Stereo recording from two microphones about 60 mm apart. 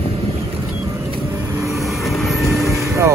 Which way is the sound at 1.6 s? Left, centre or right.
Centre.